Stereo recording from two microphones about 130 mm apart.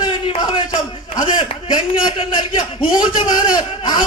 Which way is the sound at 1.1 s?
35° left (ahead or behind).